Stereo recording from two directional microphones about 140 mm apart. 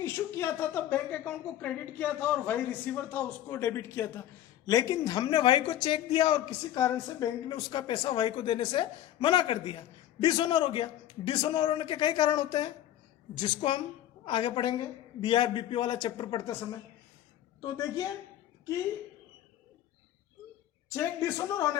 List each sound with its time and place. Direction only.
0.0 s a woman's voice: 20° left (ahead or behind)
20.9 s a man's voice: 20° left (ahead or behind)